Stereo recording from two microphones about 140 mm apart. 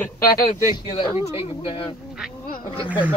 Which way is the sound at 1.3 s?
40° left (ahead or behind).